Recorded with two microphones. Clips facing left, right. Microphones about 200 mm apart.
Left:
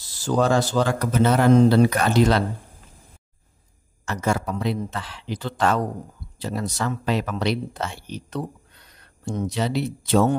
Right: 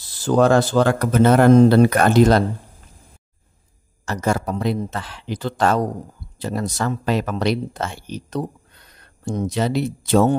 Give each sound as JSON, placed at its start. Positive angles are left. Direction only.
{"t": 0.2, "sound": "speech", "side_deg": -60}
{"t": 4.0, "sound": "speech", "side_deg": -40}